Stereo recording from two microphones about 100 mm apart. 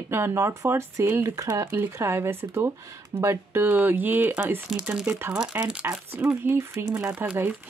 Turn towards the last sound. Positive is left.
turn(degrees=-20)  # may be behind; listen again after turning